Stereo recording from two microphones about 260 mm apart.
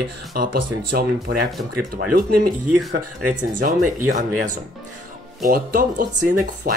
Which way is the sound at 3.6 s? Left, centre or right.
Right.